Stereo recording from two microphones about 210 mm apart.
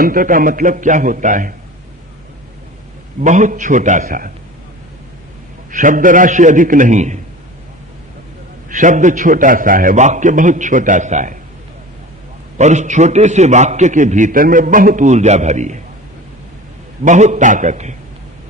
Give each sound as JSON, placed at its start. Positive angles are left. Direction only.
{"t": 0.0, "sound": "a man's voice", "side_deg": -40}
{"t": 3.2, "sound": "a man's voice", "side_deg": -35}
{"t": 5.7, "sound": "a man's voice", "side_deg": -40}
{"t": 8.7, "sound": "a man's voice", "side_deg": -35}
{"t": 12.5, "sound": "a man's voice", "side_deg": -35}
{"t": 17.0, "sound": "a man's voice", "side_deg": -35}